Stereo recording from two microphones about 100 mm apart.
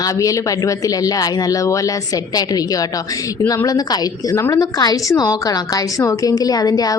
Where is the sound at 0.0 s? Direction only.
35° left (ahead or behind).